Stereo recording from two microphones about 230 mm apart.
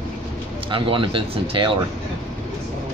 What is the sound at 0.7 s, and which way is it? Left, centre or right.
Speech, right.